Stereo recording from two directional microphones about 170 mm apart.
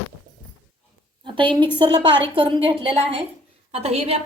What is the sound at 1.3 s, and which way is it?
A woman's voice, 30° right (ahead or behind).